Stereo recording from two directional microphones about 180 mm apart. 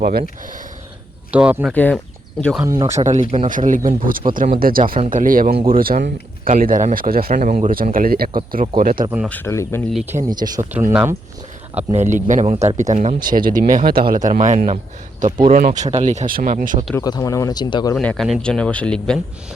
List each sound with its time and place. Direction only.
0.0 s speech: 60° right (ahead or behind)
1.3 s speech: 5° right (ahead or behind)
1.7 s speech: 10° left (ahead or behind)
2.6 s speech: 20° right (ahead or behind)
3.0 s speech: 40° right (ahead or behind)
9.3 s speech: 15° left (ahead or behind)
10.2 s speech: 20° right (ahead or behind)
10.8 s speech: 10° right (ahead or behind)
11.9 s speech: 40° right (ahead or behind)
14.3 s speech: 40° right (ahead or behind)
16.9 s speech: 20° left (ahead or behind)
17.9 s a man's voice: 5° left (ahead or behind)